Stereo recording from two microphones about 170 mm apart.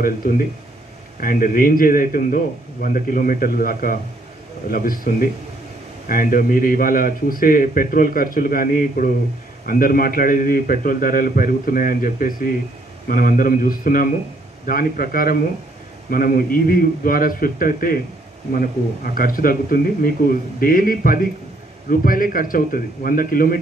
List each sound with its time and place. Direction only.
1.2 s a man's voice: 55° left (ahead or behind)